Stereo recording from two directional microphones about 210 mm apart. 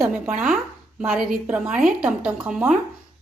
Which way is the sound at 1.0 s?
Centre (ahead or behind).